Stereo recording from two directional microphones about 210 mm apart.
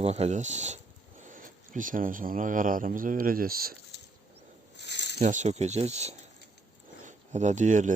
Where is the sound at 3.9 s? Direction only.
55° left (ahead or behind).